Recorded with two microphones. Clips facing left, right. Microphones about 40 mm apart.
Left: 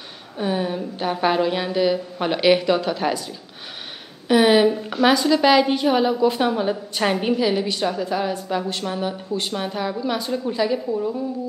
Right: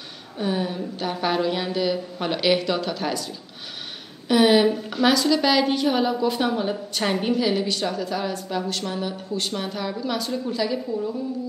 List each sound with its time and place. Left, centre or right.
0.4 s a woman's voice: centre
7.7 s a woman's voice: left